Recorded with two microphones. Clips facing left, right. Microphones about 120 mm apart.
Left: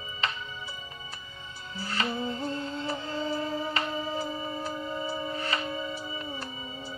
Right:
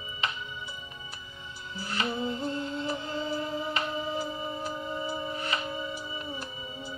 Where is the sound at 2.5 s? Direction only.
35° left (ahead or behind).